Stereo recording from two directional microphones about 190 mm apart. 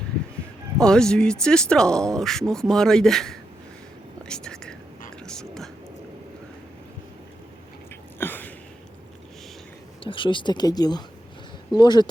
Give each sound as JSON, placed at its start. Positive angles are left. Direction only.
{"t": 0.8, "sound": "speech", "side_deg": 5}
{"t": 4.3, "sound": "whispering", "side_deg": 5}
{"t": 8.2, "sound": "a sound", "side_deg": 10}
{"t": 10.0, "sound": "speech", "side_deg": 25}